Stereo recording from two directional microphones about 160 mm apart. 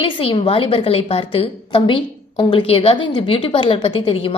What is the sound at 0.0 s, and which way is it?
A woman's voice, 35° left (ahead or behind).